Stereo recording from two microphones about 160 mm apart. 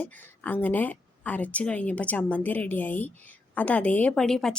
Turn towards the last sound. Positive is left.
turn(degrees=5)  # may be behind; listen again after turning